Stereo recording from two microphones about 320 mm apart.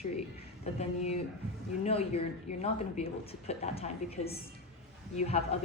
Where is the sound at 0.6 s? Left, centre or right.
Centre.